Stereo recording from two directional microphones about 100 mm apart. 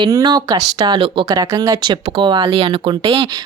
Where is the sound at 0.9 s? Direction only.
60° right (ahead or behind).